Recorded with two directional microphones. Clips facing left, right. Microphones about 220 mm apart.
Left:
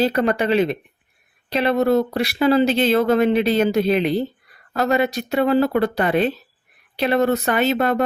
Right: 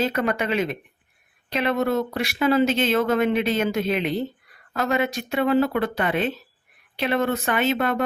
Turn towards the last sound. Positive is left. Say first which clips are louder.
# left 4 dB
turn(degrees=40)  # may be behind; listen again after turning